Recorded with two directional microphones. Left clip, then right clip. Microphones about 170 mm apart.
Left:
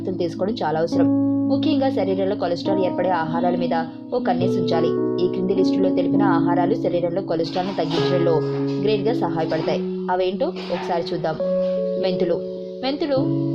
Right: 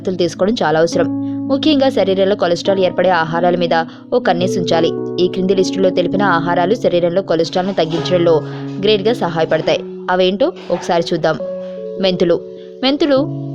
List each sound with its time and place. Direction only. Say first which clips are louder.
0.2 s a woman's voice: right 9 dB; 45° right (ahead or behind)